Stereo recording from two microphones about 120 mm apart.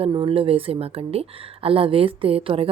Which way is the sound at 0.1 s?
50° right (ahead or behind).